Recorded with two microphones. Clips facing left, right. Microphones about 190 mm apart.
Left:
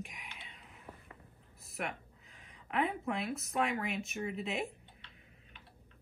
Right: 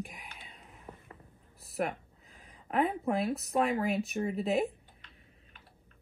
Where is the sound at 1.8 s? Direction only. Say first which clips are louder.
Right 7 dB; 40° right (ahead or behind).